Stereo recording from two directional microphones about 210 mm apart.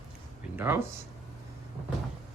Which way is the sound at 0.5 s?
10° right (ahead or behind).